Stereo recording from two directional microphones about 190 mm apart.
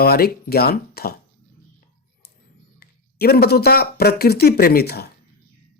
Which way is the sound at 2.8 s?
55° left (ahead or behind).